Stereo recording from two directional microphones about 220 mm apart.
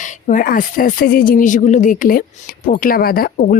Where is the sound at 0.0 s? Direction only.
35° left (ahead or behind).